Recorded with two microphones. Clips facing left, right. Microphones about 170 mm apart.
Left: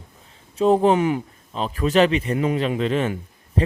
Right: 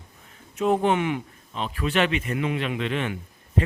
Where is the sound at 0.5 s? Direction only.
35° left (ahead or behind).